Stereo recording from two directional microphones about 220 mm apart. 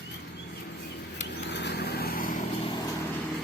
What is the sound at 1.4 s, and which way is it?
Vehicle, 50° left (ahead or behind).